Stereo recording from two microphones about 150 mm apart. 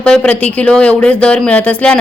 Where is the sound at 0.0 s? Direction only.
5° left (ahead or behind).